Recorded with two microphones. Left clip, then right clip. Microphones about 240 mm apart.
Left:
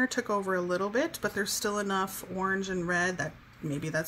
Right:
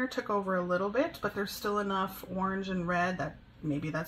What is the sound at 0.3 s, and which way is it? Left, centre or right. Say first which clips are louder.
Speech: left 1 dB; left.